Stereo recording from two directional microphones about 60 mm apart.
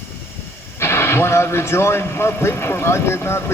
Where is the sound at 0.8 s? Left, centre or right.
Left.